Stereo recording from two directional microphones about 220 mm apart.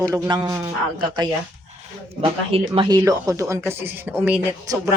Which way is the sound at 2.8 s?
20° right (ahead or behind).